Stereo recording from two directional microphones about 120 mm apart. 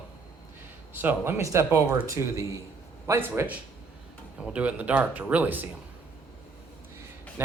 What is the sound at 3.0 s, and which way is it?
Speech, 20° right (ahead or behind).